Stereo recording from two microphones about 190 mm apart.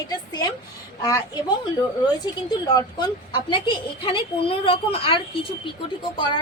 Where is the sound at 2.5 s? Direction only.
20° left (ahead or behind).